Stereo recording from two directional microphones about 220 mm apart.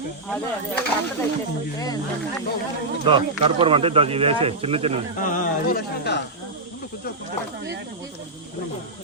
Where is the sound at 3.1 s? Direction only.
25° right (ahead or behind).